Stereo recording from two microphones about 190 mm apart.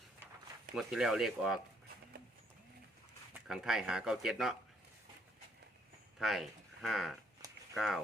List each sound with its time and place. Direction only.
0.8 s speech: centre (ahead or behind)
3.4 s speech: centre (ahead or behind)
6.1 s speech: centre (ahead or behind)
7.4 s a sound: 20° right (ahead or behind)
7.8 s speech: centre (ahead or behind)